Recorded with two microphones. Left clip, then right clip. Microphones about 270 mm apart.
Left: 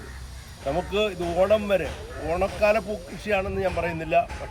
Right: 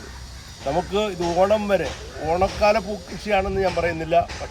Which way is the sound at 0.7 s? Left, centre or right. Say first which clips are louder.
Right 2 dB; centre.